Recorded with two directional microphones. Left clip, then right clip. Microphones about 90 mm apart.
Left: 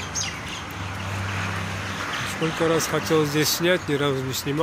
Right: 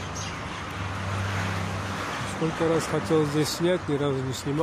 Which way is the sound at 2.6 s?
15° right (ahead or behind).